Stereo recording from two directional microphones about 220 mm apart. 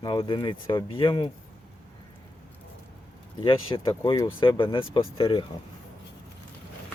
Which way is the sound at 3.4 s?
25° left (ahead or behind).